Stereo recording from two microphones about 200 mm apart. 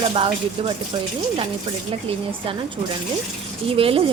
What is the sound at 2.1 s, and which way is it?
Speech, 25° right (ahead or behind).